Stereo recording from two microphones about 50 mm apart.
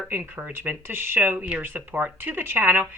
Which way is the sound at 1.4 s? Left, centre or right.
Right.